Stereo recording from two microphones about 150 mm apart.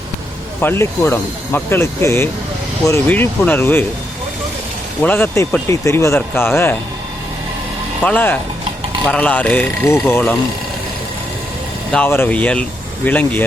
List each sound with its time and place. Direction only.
0.6 s speech: 15° left (ahead or behind)
5.0 s speech: 15° left (ahead or behind)
8.0 s speech: 10° left (ahead or behind)
11.9 s speech: 10° left (ahead or behind)